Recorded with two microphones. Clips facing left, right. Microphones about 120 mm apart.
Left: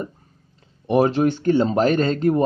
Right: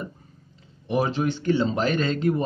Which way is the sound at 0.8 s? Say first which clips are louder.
Left 6 dB; 55° left (ahead or behind).